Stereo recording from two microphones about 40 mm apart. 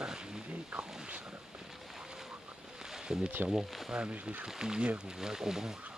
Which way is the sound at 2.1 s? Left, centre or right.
Centre.